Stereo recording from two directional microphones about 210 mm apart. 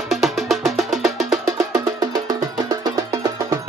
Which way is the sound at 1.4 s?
15° right (ahead or behind).